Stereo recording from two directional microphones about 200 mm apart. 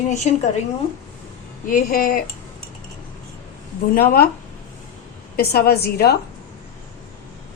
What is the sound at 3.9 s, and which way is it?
Speech, 50° left (ahead or behind).